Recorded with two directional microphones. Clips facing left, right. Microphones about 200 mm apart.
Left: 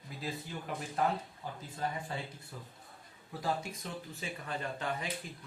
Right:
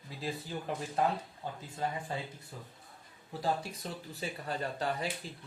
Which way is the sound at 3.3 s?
30° right (ahead or behind).